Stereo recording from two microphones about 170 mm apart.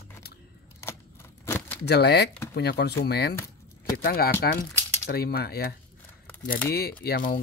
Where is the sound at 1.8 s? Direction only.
75° left (ahead or behind).